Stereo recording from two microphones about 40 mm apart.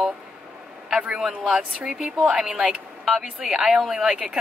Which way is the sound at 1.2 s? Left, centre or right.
Centre.